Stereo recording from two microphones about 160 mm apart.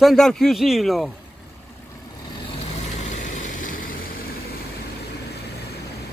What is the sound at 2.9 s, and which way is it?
Vehicle, 50° left (ahead or behind).